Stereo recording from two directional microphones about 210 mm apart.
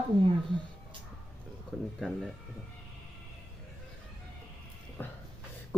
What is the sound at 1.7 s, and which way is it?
Speech, centre (ahead or behind).